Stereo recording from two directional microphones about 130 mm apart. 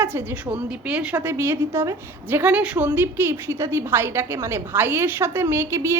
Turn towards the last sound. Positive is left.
turn(degrees=-20)  # may be behind; listen again after turning